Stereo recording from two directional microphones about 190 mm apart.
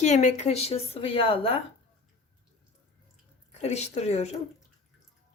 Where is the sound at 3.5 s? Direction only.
35° left (ahead or behind).